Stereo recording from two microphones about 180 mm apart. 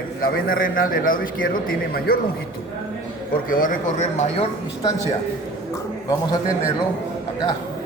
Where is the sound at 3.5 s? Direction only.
50° left (ahead or behind).